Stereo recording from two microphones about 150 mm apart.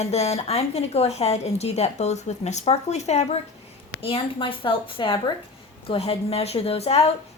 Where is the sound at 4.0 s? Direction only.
35° left (ahead or behind).